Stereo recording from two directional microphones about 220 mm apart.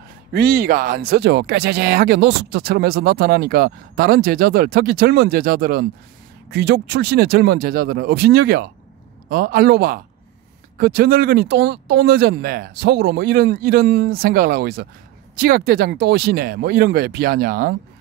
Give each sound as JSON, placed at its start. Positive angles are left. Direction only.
{"t": 0.3, "sound": "speech", "side_deg": -45}